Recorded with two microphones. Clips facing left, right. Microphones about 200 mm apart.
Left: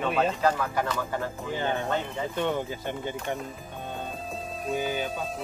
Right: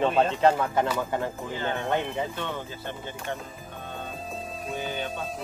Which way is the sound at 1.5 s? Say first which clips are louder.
Left 5 dB; 15° left (ahead or behind).